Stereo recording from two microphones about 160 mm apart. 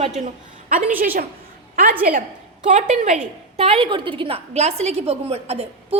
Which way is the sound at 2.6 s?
50° right (ahead or behind).